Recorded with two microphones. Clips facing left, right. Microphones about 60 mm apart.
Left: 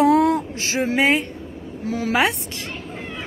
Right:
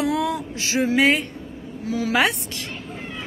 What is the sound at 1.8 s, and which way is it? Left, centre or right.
Speech, left.